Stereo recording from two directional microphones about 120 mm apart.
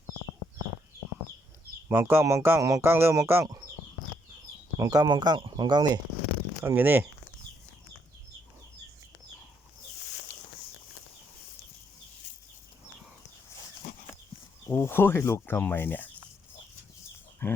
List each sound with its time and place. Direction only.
1.9 s speech: 20° right (ahead or behind)
4.8 s speech: 30° right (ahead or behind)
6.7 s speech: 15° right (ahead or behind)
14.7 s speech: 20° left (ahead or behind)
17.4 s speech: 15° left (ahead or behind)